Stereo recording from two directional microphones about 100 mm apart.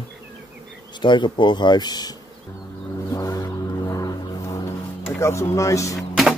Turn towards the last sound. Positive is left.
turn(degrees=0)  # may be behind; listen again after turning